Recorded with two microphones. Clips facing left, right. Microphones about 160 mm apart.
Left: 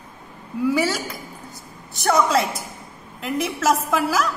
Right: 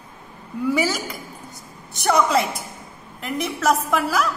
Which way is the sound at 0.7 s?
Centre (ahead or behind).